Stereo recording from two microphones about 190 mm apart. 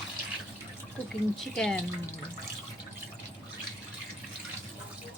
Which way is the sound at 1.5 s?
5° left (ahead or behind).